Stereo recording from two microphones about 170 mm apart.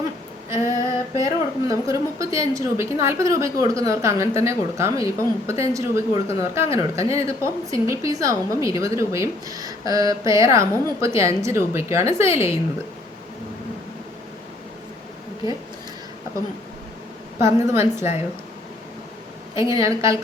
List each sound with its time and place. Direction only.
1.1 s a woman's voice: 20° right (ahead or behind)
17.4 s speech: 15° right (ahead or behind)
19.5 s a woman's voice: 20° right (ahead or behind)